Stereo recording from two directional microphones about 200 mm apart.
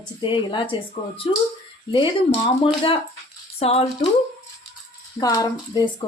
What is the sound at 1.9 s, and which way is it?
Speech, 25° left (ahead or behind).